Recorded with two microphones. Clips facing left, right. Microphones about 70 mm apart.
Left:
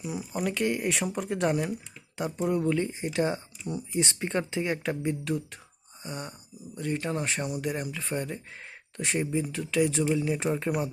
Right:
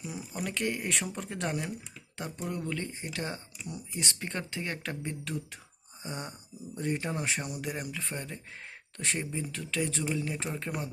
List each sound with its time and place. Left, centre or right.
0.0 s speech: centre
2.4 s speech: centre
6.0 s a sound: right
6.7 s speech: right
7.0 s speech: centre